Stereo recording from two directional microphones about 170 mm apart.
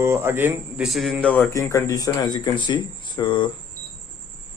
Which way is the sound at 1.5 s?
20° left (ahead or behind).